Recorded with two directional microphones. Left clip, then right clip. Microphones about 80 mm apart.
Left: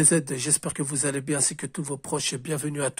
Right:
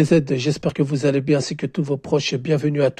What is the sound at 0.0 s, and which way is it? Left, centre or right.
Speech, right.